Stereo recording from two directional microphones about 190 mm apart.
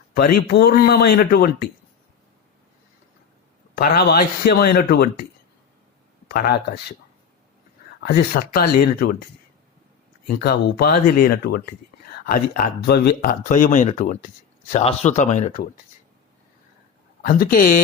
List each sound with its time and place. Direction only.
0.1 s speech: 50° left (ahead or behind)
3.8 s speech: 55° left (ahead or behind)
6.3 s speech: 55° left (ahead or behind)
8.0 s speech: 55° left (ahead or behind)
10.2 s speech: 55° left (ahead or behind)
17.2 s speech: 50° left (ahead or behind)